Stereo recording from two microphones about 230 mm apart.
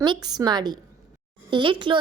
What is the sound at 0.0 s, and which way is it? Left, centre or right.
A woman's voice, centre.